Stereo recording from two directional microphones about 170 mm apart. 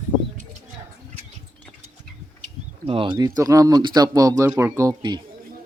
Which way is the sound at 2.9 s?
30° right (ahead or behind).